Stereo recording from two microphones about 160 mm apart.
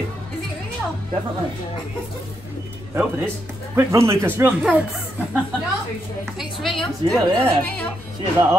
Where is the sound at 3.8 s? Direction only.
15° right (ahead or behind).